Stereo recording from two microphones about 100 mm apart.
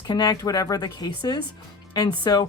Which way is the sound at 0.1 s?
40° left (ahead or behind).